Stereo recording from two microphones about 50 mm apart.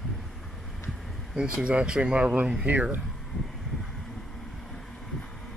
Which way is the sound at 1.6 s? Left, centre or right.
Right.